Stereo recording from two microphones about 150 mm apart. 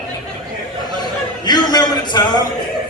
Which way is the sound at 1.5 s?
30° left (ahead or behind).